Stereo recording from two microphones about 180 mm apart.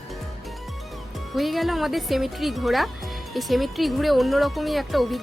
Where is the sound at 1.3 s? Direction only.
Centre (ahead or behind).